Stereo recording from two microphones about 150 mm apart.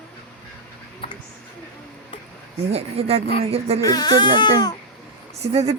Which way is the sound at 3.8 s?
25° left (ahead or behind).